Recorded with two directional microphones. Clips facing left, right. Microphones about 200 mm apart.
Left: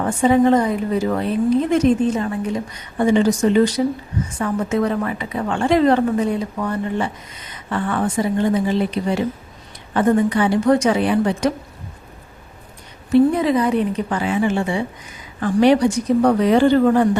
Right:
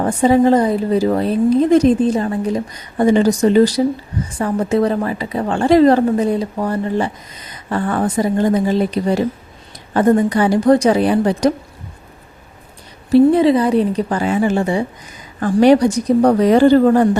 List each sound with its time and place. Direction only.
0.0 s a woman's voice: 35° right (ahead or behind)
13.1 s a woman's voice: 30° right (ahead or behind)